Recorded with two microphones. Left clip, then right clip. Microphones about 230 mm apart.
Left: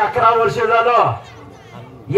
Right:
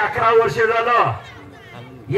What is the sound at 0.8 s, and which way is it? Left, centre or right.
Speech, right.